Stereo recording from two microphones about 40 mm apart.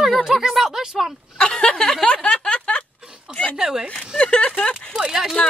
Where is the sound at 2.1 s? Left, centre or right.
Left.